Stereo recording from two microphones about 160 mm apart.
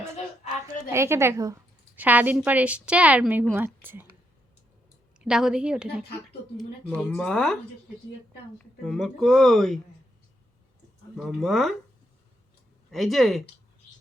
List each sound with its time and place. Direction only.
0.9 s a woman's voice: 15° right (ahead or behind)
5.2 s speech: 5° right (ahead or behind)
7.0 s speech: 5° left (ahead or behind)
11.2 s speech: centre (ahead or behind)
12.9 s speech: centre (ahead or behind)